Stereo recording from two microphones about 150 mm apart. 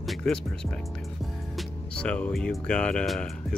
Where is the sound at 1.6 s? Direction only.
5° left (ahead or behind).